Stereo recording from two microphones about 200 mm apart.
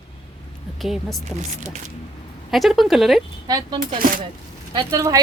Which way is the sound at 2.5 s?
Centre (ahead or behind).